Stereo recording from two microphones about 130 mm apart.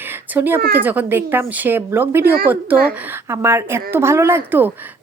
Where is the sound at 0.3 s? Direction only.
15° right (ahead or behind).